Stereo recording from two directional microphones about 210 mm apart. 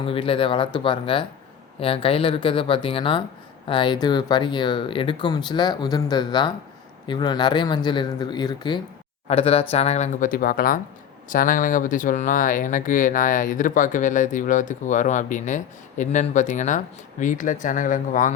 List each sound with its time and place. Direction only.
0.0 s speech: 25° left (ahead or behind)